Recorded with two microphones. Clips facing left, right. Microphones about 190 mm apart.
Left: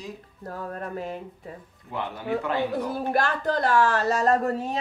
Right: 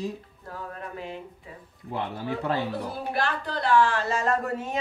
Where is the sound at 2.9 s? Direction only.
45° left (ahead or behind).